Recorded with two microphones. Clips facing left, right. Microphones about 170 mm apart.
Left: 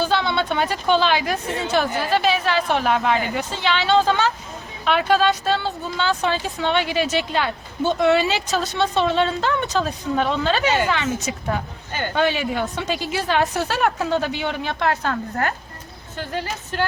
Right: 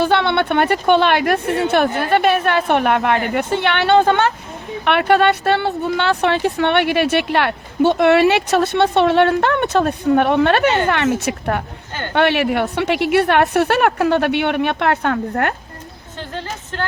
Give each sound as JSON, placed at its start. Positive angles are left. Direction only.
{"t": 0.0, "sound": "a woman's voice", "side_deg": -65}
{"t": 16.3, "sound": "a woman's voice", "side_deg": 10}